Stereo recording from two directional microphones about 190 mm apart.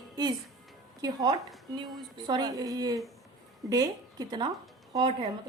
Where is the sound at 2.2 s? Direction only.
20° right (ahead or behind).